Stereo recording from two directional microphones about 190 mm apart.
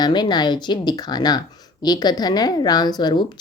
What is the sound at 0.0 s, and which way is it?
Speech, 20° left (ahead or behind).